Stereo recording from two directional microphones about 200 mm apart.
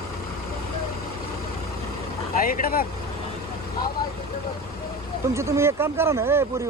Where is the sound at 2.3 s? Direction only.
45° left (ahead or behind).